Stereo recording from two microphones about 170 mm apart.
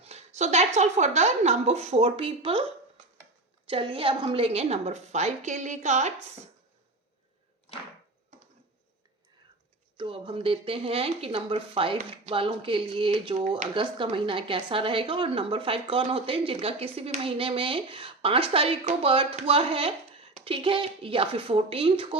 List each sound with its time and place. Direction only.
0.0 s speech: 40° right (ahead or behind)
3.7 s speech: 30° right (ahead or behind)
10.0 s speech: 30° right (ahead or behind)